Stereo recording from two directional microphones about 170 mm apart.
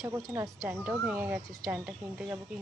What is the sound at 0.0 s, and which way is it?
Speech, 15° right (ahead or behind).